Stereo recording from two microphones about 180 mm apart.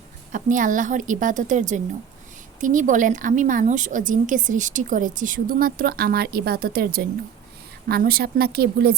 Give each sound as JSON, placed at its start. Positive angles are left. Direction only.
{"t": 0.3, "sound": "speech", "side_deg": -45}